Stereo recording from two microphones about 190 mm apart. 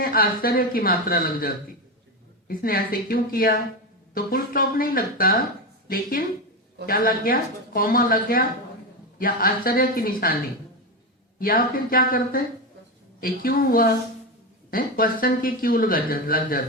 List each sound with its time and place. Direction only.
0.0 s speech: 50° left (ahead or behind)
11.3 s speech: 50° left (ahead or behind)